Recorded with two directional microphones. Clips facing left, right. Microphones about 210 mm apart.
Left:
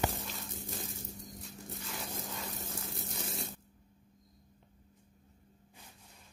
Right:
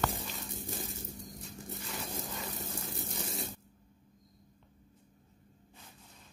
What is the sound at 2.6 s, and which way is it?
Water, centre (ahead or behind).